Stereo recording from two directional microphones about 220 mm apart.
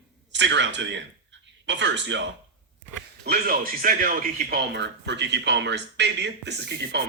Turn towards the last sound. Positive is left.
turn(degrees=-50)  # may be behind; listen again after turning